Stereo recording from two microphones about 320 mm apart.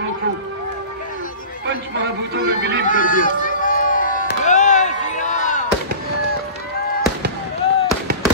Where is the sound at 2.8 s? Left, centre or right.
Left.